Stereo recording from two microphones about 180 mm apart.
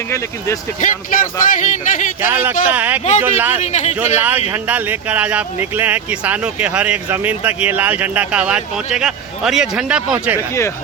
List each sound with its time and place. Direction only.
0.1 s speech: 15° left (ahead or behind)
0.8 s speech: 50° left (ahead or behind)
2.2 s speech: 10° right (ahead or behind)
3.0 s speech: 40° left (ahead or behind)
3.3 s speech: 10° right (ahead or behind)
3.6 s speech: 40° left (ahead or behind)
3.9 s speech: 10° right (ahead or behind)